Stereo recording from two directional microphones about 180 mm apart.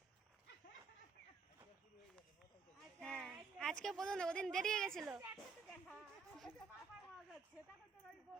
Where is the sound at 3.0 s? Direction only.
5° left (ahead or behind).